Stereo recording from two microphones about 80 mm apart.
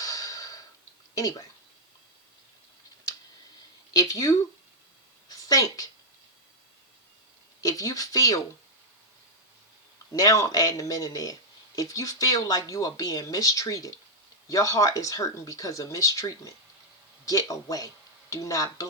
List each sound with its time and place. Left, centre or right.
0.0 s a sound: left
1.1 s speech: left
3.9 s a woman's voice: left
7.6 s speech: left
10.1 s speech: left